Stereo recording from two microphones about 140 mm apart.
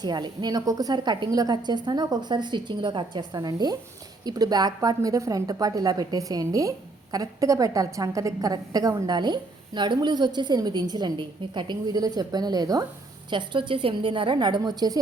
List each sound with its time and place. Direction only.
0.0 s a woman's voice: 30° right (ahead or behind)